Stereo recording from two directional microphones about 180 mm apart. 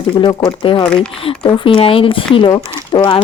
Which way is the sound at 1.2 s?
30° left (ahead or behind).